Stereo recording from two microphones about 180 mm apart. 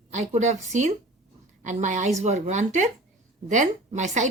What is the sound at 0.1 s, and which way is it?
A woman's voice, 40° right (ahead or behind).